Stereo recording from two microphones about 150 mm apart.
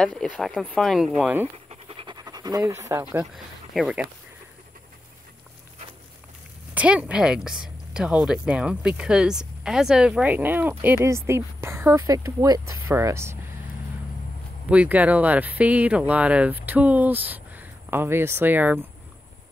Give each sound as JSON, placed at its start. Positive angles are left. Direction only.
{"t": 0.0, "sound": "speech", "side_deg": 5}
{"t": 1.7, "sound": "pant", "side_deg": -40}
{"t": 3.7, "sound": "speech", "side_deg": -5}
{"t": 6.7, "sound": "speech", "side_deg": -10}
{"t": 14.7, "sound": "speech", "side_deg": -10}